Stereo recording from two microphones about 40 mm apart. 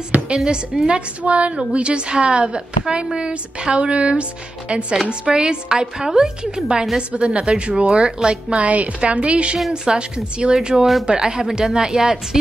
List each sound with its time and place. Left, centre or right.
0.1 s a woman's voice: right
0.7 s a woman's voice: centre
1.2 s a woman's voice: right
8.5 s a woman's voice: right; by 12.4 s centre